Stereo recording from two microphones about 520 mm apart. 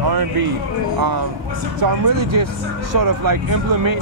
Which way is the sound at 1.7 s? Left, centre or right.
Right.